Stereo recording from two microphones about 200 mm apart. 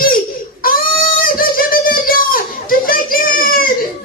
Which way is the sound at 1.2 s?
45° left (ahead or behind).